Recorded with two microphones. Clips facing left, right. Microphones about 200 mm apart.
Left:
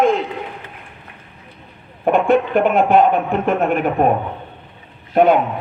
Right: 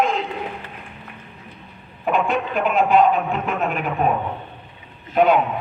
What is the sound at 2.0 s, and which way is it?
A man's voice, 55° left (ahead or behind).